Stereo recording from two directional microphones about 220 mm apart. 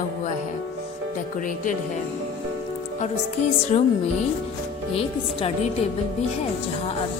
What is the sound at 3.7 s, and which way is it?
Speech, 25° left (ahead or behind).